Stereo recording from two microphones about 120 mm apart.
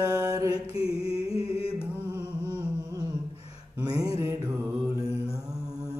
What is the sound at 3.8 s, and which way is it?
Mantra, 35° right (ahead or behind).